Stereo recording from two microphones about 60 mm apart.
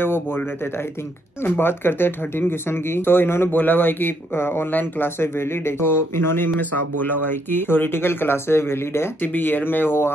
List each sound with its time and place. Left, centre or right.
1.4 s speech: left
9.2 s speech: left